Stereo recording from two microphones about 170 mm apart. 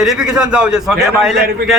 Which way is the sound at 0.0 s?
Centre (ahead or behind).